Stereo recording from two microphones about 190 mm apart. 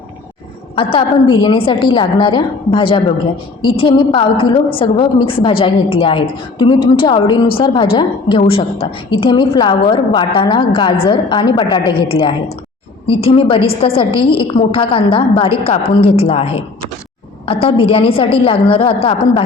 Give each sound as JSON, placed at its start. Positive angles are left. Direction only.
{"t": 0.8, "sound": "a woman's voice", "side_deg": 30}